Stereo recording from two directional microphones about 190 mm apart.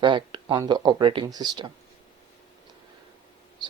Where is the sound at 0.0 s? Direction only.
25° right (ahead or behind).